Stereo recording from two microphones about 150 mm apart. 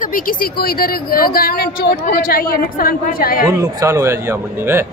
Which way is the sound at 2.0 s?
70° left (ahead or behind).